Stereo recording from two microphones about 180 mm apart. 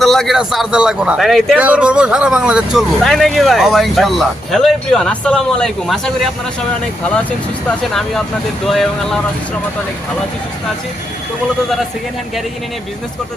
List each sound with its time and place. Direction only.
0.0 s a man's voice: centre (ahead or behind)
8.6 s a man's voice: centre (ahead or behind)